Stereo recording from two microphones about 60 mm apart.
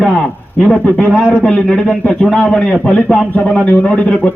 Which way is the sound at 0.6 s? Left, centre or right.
Centre.